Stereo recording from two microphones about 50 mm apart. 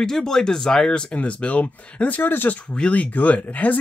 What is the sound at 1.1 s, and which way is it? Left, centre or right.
Speech, left.